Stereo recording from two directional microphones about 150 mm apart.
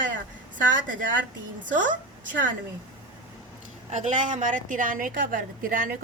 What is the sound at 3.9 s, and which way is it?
A woman's voice, 50° right (ahead or behind).